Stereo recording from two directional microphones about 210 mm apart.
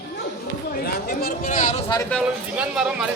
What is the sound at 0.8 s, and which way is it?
Chatter, 45° left (ahead or behind).